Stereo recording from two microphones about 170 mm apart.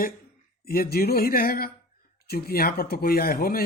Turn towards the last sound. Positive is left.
turn(degrees=60)  # may be behind; listen again after turning